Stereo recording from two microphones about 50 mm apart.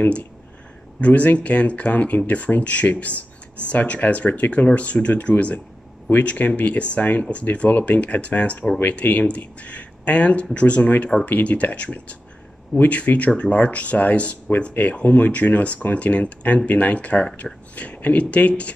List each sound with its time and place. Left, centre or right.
0.0 s speech: left